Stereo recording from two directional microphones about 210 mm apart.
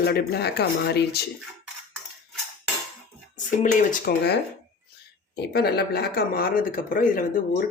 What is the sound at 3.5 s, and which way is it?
Speech, 40° left (ahead or behind).